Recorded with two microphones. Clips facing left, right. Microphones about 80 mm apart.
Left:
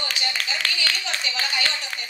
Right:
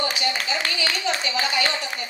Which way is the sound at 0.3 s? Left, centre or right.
Right.